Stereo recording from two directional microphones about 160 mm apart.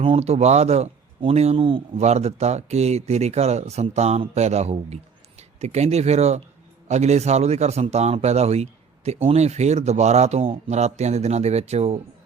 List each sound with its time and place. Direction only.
0.0 s speech: 40° right (ahead or behind)